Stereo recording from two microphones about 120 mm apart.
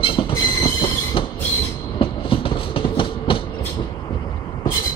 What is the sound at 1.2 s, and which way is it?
Train, 45° left (ahead or behind).